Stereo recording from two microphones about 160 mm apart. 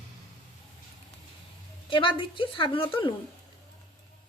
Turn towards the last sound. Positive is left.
turn(degrees=30)  # may be behind; listen again after turning